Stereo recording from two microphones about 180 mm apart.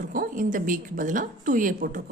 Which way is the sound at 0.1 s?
50° right (ahead or behind).